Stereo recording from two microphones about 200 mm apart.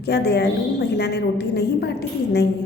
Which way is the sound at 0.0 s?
55° left (ahead or behind).